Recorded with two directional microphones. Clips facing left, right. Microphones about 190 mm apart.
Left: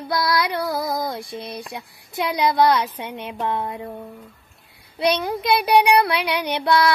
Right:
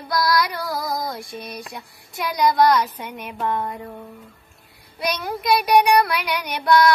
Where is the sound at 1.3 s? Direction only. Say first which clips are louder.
Left 2 dB; 20° left (ahead or behind).